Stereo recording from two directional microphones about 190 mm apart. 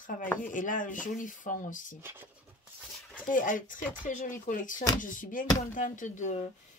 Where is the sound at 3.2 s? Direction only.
45° left (ahead or behind).